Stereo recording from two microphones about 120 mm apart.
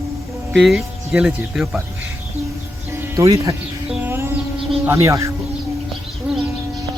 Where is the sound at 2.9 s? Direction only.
25° right (ahead or behind).